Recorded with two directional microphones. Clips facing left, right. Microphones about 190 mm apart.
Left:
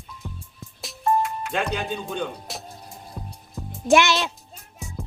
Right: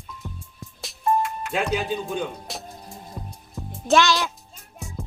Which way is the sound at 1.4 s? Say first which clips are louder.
Right 1 dB; centre (ahead or behind).